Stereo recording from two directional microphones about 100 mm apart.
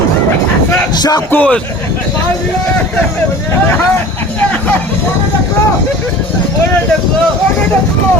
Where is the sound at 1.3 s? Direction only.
10° left (ahead or behind).